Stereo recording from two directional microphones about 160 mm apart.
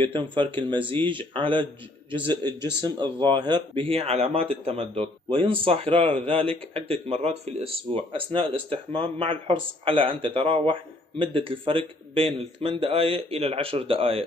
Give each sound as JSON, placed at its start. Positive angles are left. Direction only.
{"t": 0.0, "sound": "speech", "side_deg": -30}